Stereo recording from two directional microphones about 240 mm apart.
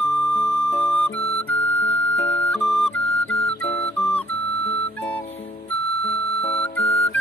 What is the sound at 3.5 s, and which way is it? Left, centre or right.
Music, centre.